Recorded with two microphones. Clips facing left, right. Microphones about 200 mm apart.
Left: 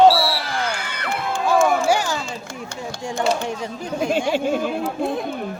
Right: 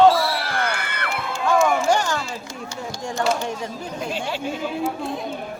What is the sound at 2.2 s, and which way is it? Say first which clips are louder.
Speech: left 1 dB; 55° left (ahead or behind).